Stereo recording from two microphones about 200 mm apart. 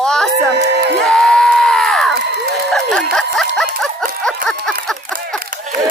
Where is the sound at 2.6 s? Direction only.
Centre (ahead or behind).